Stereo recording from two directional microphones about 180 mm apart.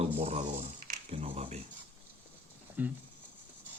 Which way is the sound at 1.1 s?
40° right (ahead or behind).